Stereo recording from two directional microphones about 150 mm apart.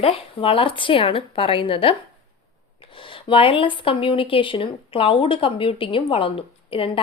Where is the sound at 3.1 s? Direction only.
35° left (ahead or behind).